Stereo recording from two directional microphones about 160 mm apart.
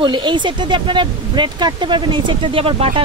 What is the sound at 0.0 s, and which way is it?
Speech, 30° right (ahead or behind).